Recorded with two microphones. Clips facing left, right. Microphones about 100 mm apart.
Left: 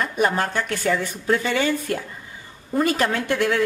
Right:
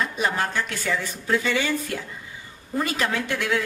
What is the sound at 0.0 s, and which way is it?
A woman's voice, 50° left (ahead or behind).